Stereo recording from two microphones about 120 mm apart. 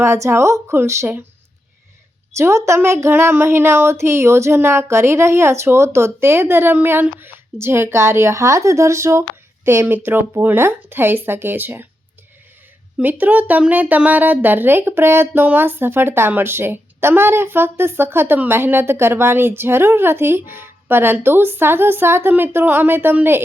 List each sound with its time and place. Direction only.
0.0 s speech: 20° right (ahead or behind)
2.3 s speech: 25° right (ahead or behind)
13.0 s speech: 15° right (ahead or behind)